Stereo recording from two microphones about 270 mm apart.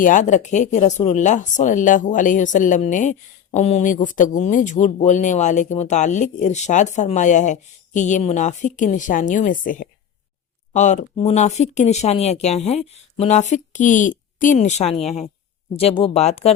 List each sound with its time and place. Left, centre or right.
0.0 s speech: left